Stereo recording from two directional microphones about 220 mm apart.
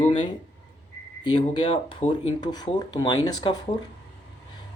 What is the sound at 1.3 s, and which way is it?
Speech, 20° left (ahead or behind).